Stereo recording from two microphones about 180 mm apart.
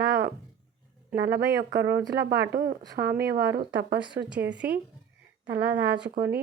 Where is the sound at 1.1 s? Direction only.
60° right (ahead or behind).